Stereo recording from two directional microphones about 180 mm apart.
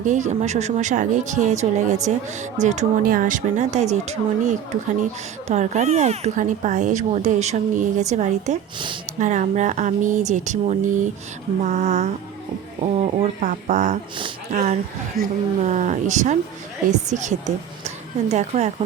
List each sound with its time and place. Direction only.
0.0 s a woman's voice: 45° right (ahead or behind)